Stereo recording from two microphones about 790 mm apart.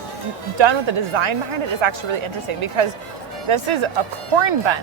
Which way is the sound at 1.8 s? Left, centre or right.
Right.